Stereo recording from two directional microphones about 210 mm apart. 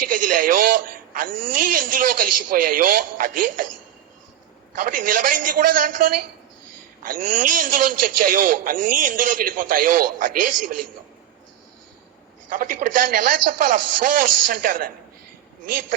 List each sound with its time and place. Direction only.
0.0 s a man's voice: 40° right (ahead or behind)
4.8 s a man's voice: 40° right (ahead or behind)
12.5 s a man's voice: 40° right (ahead or behind)